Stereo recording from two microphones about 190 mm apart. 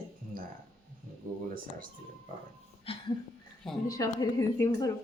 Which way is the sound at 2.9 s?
30° left (ahead or behind).